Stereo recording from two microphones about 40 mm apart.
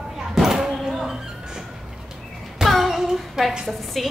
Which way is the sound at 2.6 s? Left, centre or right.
Centre.